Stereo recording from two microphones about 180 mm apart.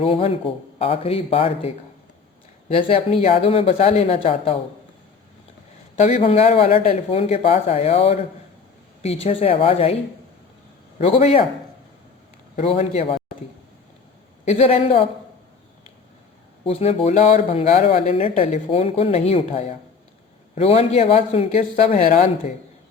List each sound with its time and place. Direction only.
0.0 s speech: 35° left (ahead or behind)
6.0 s speech: 35° left (ahead or behind)
9.2 s speech: 35° left (ahead or behind)
10.9 s speech: 35° left (ahead or behind)
12.5 s speech: 35° left (ahead or behind)
14.4 s speech: 35° left (ahead or behind)
16.6 s speech: 35° left (ahead or behind)